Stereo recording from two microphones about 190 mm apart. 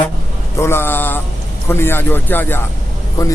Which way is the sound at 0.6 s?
10° left (ahead or behind).